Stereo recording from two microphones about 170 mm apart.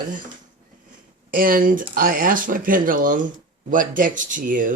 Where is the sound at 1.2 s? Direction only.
55° right (ahead or behind).